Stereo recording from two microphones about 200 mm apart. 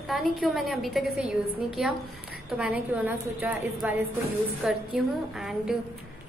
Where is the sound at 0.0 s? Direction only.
Centre (ahead or behind).